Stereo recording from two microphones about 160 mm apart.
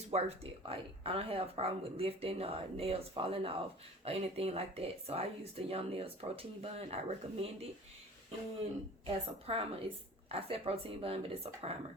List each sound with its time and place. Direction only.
0.1 s a woman's voice: 40° right (ahead or behind)
9.0 s a woman's voice: 35° right (ahead or behind)